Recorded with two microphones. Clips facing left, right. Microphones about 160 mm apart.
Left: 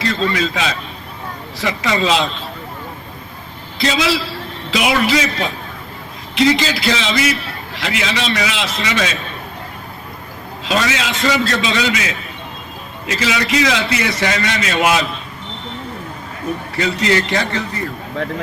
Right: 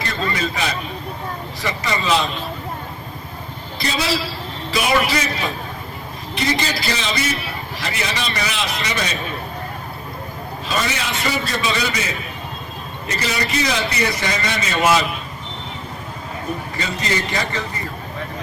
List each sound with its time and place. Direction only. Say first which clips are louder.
0.0 s a man's voice: left 5 dB; 90° left
3.8 s a man's voice: left 5 dB; 90° left
6.3 s a man's voice: left 7 dB; 90° left
10.7 s a man's voice: left 5 dB; 90° left
16.7 s a man's voice: left 8 dB; 75° left (ahead or behind)